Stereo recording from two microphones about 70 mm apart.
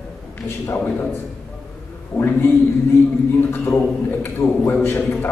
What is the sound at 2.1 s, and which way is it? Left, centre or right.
A man's voice, left.